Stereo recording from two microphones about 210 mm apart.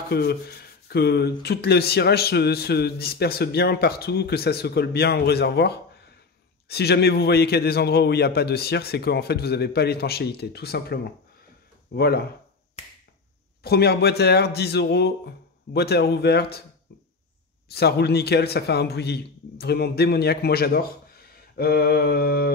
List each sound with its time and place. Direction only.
0.1 s rub: 50° left (ahead or behind)
13.6 s rub: 50° left (ahead or behind)
17.6 s rub: 50° left (ahead or behind)